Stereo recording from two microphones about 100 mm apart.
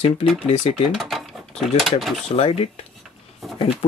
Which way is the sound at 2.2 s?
90° left.